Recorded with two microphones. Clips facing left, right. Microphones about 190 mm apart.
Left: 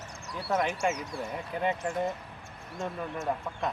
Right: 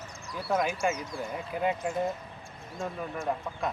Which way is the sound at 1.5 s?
5° right (ahead or behind).